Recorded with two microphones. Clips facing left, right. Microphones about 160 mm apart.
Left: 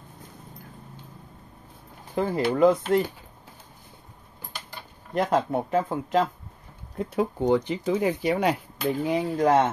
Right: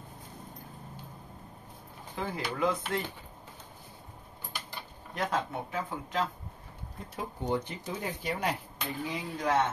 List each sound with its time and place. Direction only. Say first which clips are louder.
2.1 s speech: left 11 dB; 45° left (ahead or behind)
5.1 s speech: left 9 dB; 50° left (ahead or behind)
7.0 s speech: left 13 dB; 90° left; by 9.7 s 55° left (ahead or behind)